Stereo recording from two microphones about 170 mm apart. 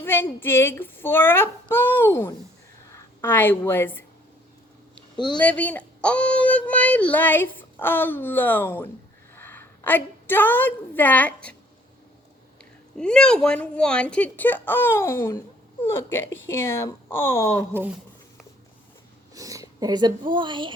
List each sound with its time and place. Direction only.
0.0 s a woman's voice: 10° left (ahead or behind)
5.1 s speech: 25° left (ahead or behind)
5.4 s a woman's voice: 10° left (ahead or behind)
13.0 s speech: 5° left (ahead or behind)
17.6 s speech: 10° right (ahead or behind)
19.3 s a sound: 20° right (ahead or behind)
20.3 s a woman's voice: 30° right (ahead or behind)